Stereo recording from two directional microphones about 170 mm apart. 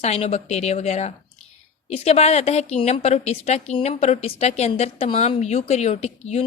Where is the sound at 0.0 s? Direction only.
40° left (ahead or behind).